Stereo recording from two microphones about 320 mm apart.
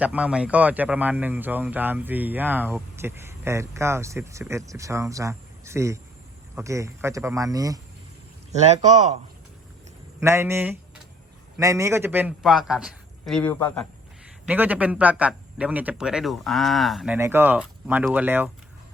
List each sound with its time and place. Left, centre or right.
0.0 s a man's voice: centre; by 9.1 s right
10.2 s a man's voice: centre